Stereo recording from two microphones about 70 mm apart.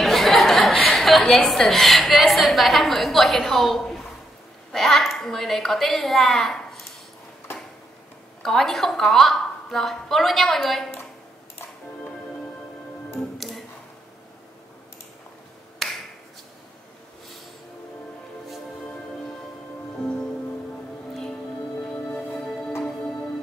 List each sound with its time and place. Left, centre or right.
0.0 s a woman's voice: centre
8.4 s a woman's voice: centre
13.4 s music: centre
20.0 s music: centre
21.9 s music: centre